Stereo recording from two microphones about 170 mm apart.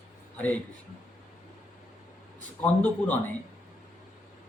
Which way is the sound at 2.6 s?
10° left (ahead or behind).